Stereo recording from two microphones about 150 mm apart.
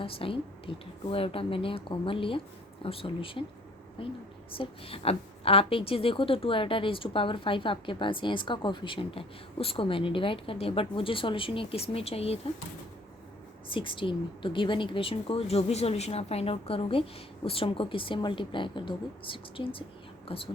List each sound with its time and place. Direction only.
0.0 s a woman's voice: 35° left (ahead or behind)
13.7 s a woman's voice: 35° left (ahead or behind)